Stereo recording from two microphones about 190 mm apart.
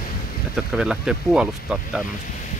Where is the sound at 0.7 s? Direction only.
5° right (ahead or behind).